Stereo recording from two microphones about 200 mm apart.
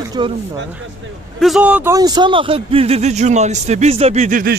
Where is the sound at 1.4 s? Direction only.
Centre (ahead or behind); by 4.5 s 40° right (ahead or behind).